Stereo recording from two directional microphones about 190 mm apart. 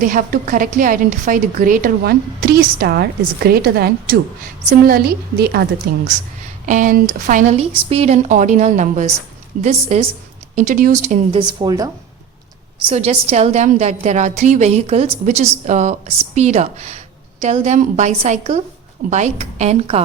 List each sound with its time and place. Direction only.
0.0 s a woman's voice: 45° right (ahead or behind); by 11.9 s 20° right (ahead or behind)
12.9 s a woman's voice: 35° right (ahead or behind)